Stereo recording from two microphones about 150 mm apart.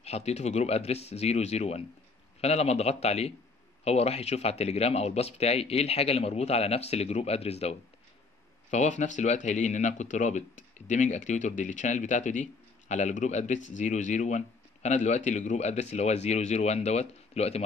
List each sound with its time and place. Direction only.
0.0 s speech: 45° left (ahead or behind)